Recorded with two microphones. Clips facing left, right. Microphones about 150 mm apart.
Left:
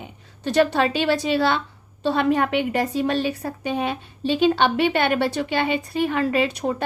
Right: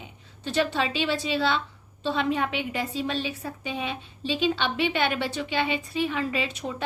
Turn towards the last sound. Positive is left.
turn(degrees=55)  # may be behind; listen again after turning